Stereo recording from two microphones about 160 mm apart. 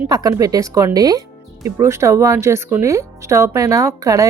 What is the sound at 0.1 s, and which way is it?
Speech, 20° right (ahead or behind).